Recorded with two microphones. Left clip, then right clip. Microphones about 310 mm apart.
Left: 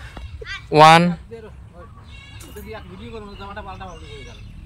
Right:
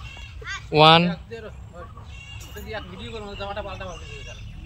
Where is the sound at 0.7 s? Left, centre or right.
Centre.